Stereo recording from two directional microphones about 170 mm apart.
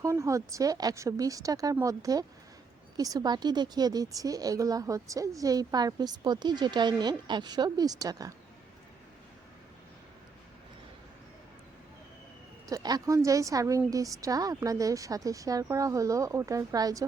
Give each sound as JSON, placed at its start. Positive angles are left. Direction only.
{"t": 0.0, "sound": "a woman's voice", "side_deg": -20}
{"t": 12.6, "sound": "a woman's voice", "side_deg": -20}